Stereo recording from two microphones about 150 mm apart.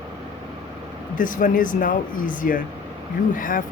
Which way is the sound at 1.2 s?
65° left (ahead or behind).